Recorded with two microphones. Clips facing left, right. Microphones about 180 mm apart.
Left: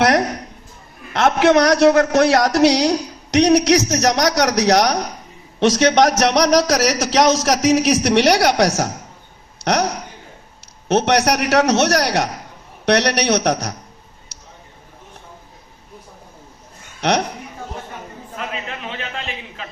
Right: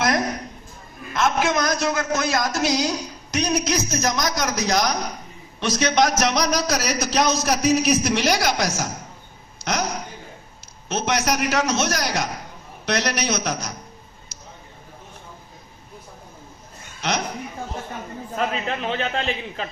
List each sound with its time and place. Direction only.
0.0 s a sound: 70° left (ahead or behind)
1.1 s a man's voice: 70° left (ahead or behind)
5.5 s a man's voice: 80° left
17.0 s speech: 70° left (ahead or behind)
18.9 s a man's voice: 35° right (ahead or behind)